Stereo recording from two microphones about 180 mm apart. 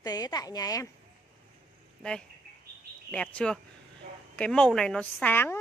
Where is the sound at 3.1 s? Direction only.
5° left (ahead or behind).